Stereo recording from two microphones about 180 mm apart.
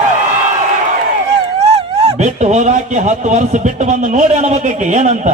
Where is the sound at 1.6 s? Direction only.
35° right (ahead or behind).